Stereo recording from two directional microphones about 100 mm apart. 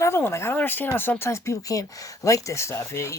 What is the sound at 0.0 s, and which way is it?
Speech, 25° left (ahead or behind).